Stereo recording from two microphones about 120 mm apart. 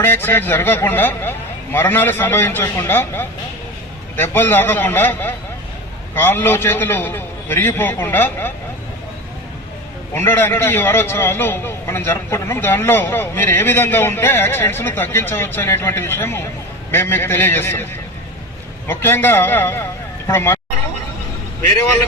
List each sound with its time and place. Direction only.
0.0 s a man's voice: 20° left (ahead or behind)
10.2 s a man's voice: 20° left (ahead or behind)
18.9 s a man's voice: 20° left (ahead or behind)